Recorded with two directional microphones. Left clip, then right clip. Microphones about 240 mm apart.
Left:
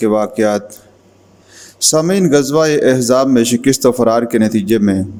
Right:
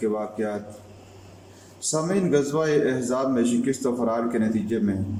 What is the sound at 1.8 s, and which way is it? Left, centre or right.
Speech, left.